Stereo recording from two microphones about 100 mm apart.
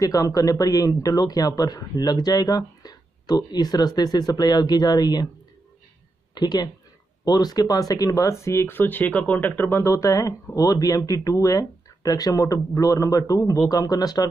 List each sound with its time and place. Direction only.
0.0 s a man's voice: 35° left (ahead or behind)
6.3 s speech: 45° left (ahead or behind); by 9.7 s 15° left (ahead or behind)
9.7 s a man's voice: 30° left (ahead or behind)